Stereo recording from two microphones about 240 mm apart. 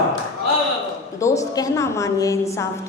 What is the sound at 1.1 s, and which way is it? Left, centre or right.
A woman's voice, centre.